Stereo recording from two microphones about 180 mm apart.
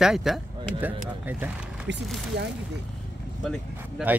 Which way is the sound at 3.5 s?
5° right (ahead or behind).